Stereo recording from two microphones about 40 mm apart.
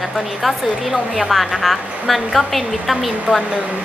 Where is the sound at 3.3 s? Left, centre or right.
Right.